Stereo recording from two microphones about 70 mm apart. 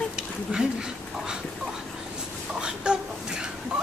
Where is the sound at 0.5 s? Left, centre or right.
Centre.